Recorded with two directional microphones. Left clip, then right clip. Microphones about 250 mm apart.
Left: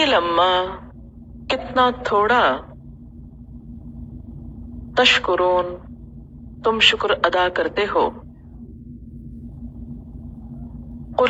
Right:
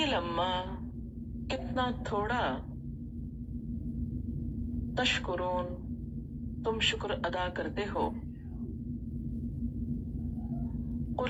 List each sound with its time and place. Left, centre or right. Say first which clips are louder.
0.0 s speech: left 15 dB; left
4.9 s speech: left 16 dB; left
11.2 s a sound: left 17 dB; left